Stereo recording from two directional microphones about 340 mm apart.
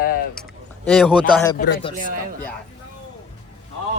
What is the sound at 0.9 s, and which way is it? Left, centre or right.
Speech, centre.